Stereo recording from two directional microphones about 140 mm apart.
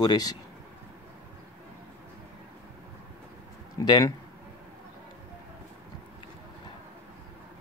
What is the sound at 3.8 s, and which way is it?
Speech, 25° left (ahead or behind).